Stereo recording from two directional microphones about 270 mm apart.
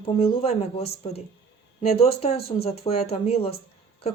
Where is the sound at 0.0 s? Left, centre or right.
Left.